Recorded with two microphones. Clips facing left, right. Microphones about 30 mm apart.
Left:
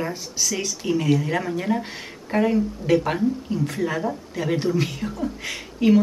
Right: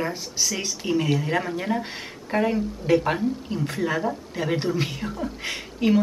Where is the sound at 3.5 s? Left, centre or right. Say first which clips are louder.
Left 2 dB; centre.